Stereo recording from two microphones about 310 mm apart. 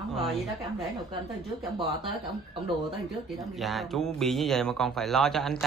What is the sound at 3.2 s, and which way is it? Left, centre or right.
Speech, centre.